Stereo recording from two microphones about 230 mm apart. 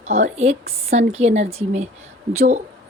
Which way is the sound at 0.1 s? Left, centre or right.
Right.